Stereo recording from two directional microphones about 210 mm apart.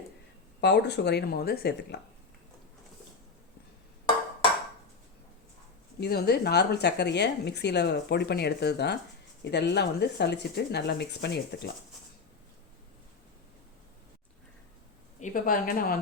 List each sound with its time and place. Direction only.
0.6 s speech: 55° left (ahead or behind)
6.0 s speech: 50° left (ahead or behind)
15.2 s speech: 40° left (ahead or behind)